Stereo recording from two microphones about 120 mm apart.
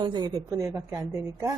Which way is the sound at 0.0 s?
35° right (ahead or behind).